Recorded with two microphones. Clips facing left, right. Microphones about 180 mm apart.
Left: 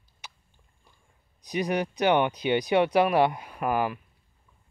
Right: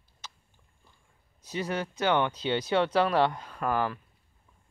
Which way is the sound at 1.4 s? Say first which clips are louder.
Left 5 dB; 15° left (ahead or behind).